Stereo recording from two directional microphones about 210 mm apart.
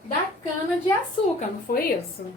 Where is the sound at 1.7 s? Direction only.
45° left (ahead or behind).